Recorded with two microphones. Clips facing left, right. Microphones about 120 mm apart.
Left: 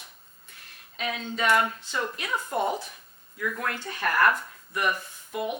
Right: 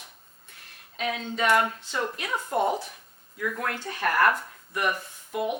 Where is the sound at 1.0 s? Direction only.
50° right (ahead or behind).